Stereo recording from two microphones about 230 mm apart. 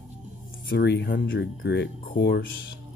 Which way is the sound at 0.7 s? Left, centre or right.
Left.